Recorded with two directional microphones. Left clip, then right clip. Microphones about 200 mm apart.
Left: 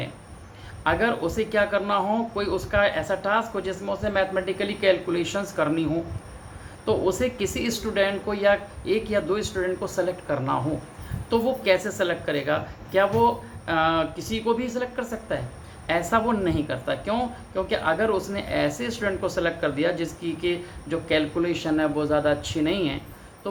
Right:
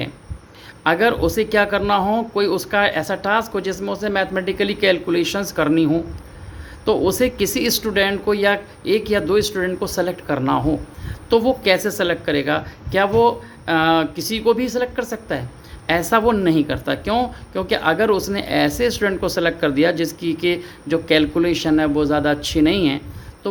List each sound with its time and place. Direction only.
0.9 s speech: 50° right (ahead or behind)